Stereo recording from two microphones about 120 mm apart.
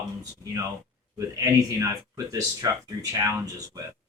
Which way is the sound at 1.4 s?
30° right (ahead or behind).